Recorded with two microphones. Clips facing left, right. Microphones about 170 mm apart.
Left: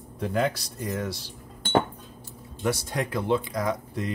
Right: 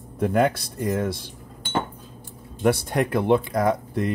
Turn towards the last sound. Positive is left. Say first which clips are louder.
# right 6 dB
turn(degrees=-55)  # may be behind; listen again after turning